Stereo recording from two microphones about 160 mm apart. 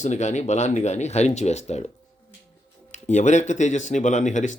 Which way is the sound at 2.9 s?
50° left (ahead or behind).